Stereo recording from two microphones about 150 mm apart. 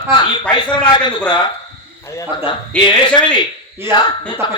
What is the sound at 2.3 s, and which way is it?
A man's voice, 30° left (ahead or behind).